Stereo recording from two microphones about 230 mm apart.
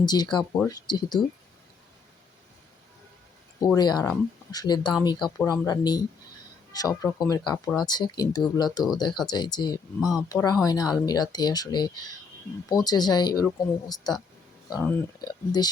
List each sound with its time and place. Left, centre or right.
0.0 s speech: centre
3.8 s speech: centre
15.2 s speech: centre